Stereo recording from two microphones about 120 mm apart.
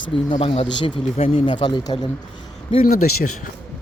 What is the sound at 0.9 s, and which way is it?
Speech, 45° left (ahead or behind).